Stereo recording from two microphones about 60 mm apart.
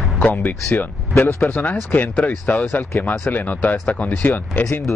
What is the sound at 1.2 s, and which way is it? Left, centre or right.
Speech, left.